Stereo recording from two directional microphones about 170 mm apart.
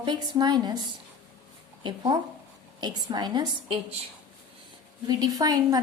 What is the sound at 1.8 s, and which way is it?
A woman's voice, 25° right (ahead or behind).